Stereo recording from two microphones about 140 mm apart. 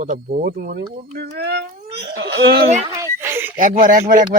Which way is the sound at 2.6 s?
50° right (ahead or behind).